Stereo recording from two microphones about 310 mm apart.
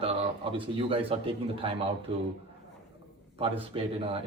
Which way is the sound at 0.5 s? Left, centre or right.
Centre.